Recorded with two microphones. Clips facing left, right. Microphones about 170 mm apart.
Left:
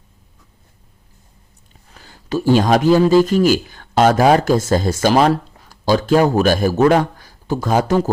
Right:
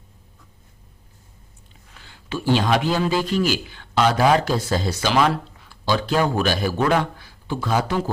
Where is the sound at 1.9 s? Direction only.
40° left (ahead or behind).